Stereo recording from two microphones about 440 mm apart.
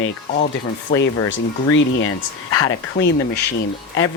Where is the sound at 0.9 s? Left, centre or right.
Left.